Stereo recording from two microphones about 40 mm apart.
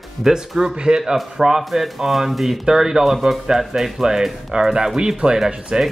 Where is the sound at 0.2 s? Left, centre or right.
Centre.